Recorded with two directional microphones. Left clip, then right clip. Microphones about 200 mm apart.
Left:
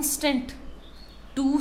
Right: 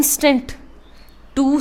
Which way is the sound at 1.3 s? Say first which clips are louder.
Right 8 dB; 40° right (ahead or behind).